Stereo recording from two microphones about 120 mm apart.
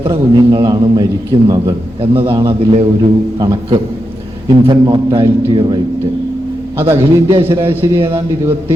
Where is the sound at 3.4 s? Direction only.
35° right (ahead or behind).